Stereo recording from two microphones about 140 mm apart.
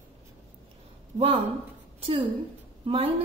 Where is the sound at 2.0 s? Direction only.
45° right (ahead or behind).